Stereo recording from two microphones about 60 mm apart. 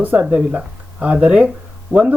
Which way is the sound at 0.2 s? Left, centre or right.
Centre.